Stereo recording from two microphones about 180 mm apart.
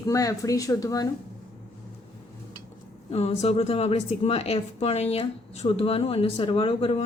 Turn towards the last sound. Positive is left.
turn(degrees=35)  # may be behind; listen again after turning